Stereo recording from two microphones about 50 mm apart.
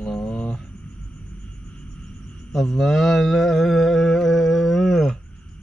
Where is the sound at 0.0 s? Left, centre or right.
Centre.